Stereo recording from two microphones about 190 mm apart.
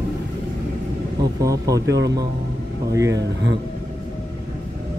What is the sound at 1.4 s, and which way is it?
Speech, 20° right (ahead or behind).